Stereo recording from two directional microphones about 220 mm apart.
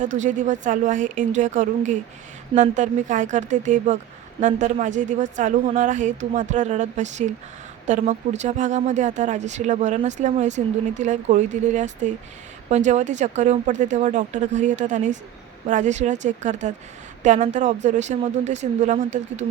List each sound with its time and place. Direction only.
0.2 s speech: 35° right (ahead or behind)